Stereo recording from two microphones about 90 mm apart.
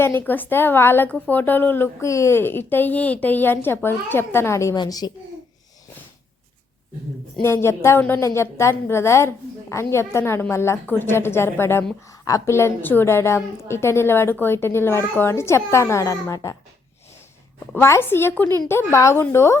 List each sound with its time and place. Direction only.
0.0 s a woman's voice: 25° left (ahead or behind)
4.8 s a woman's voice: 50° left (ahead or behind)
7.4 s a woman's voice: 30° left (ahead or behind)
17.7 s a woman's voice: 30° left (ahead or behind)